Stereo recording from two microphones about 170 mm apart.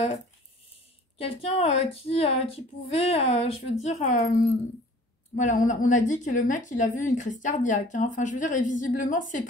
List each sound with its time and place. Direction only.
1.1 s a woman's voice: 35° left (ahead or behind)